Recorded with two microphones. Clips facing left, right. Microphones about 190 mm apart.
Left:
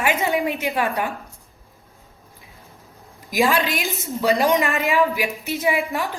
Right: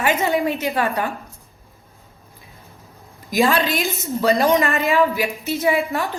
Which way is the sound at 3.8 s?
Centre (ahead or behind).